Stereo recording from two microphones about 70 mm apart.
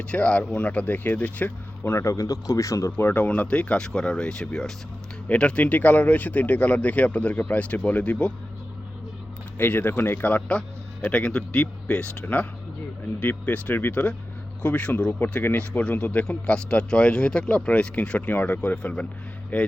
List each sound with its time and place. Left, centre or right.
0.1 s speech: centre
2.0 s speech: left
2.9 s speech: left
9.6 s speech: left
11.0 s speech: centre